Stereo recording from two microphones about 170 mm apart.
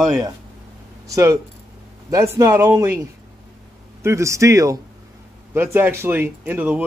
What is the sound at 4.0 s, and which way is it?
Speech, 15° right (ahead or behind).